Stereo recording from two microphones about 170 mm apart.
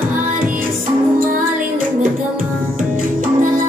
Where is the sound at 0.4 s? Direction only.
10° right (ahead or behind).